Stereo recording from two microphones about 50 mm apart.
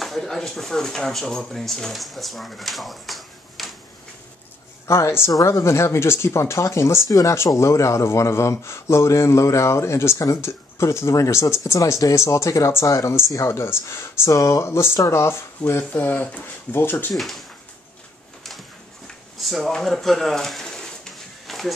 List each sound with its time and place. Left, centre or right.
0.0 s speech: centre
4.8 s speech: left
15.9 s speech: left
16.7 s speech: left
17.1 s speech: centre
19.3 s a sound: centre